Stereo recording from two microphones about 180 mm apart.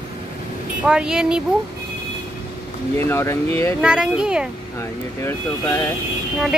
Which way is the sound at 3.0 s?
15° left (ahead or behind).